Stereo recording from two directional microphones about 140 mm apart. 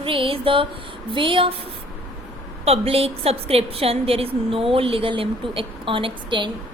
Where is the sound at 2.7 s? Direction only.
45° right (ahead or behind).